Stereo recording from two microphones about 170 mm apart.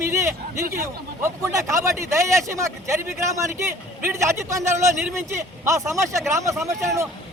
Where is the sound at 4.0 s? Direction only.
15° right (ahead or behind).